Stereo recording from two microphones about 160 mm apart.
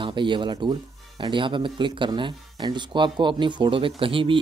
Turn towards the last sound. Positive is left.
turn(degrees=-35)  # may be behind; listen again after turning